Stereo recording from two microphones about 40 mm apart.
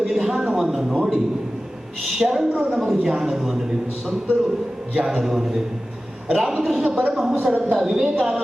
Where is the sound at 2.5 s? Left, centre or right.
Right.